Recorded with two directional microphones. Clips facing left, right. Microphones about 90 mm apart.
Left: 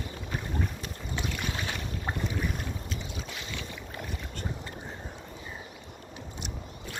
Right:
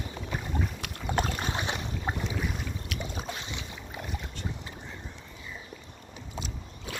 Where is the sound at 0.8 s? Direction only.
65° right (ahead or behind).